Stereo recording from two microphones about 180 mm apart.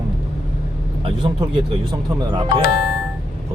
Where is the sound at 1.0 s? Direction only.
25° right (ahead or behind).